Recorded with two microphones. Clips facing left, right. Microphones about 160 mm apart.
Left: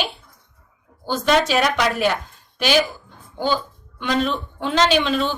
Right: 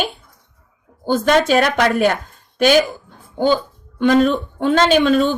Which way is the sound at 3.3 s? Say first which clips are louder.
Right 6 dB; 50° right (ahead or behind).